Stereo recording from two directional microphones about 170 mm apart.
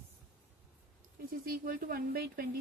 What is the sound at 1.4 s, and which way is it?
Speech, 55° right (ahead or behind).